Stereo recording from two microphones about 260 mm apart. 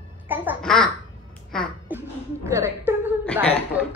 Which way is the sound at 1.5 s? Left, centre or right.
Centre.